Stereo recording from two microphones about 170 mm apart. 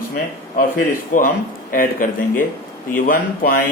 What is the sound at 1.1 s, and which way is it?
Speech, 50° left (ahead or behind).